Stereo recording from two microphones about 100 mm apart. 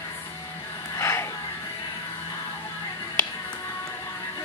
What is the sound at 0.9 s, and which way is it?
Gasp, 25° left (ahead or behind).